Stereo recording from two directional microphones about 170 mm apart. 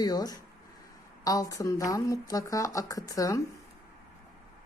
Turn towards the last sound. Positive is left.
turn(degrees=20)  # may be behind; listen again after turning